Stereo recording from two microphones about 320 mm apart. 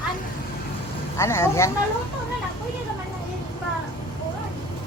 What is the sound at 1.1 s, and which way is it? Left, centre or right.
Speech, centre.